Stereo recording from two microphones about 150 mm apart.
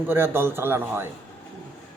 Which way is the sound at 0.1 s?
15° right (ahead or behind).